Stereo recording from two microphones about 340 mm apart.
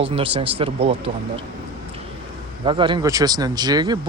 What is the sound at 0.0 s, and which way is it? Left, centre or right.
Speech, centre.